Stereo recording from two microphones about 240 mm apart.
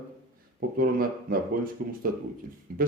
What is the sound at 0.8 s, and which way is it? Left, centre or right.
Speech, right.